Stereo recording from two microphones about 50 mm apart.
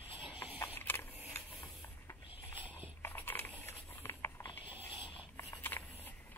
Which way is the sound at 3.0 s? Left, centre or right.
Left.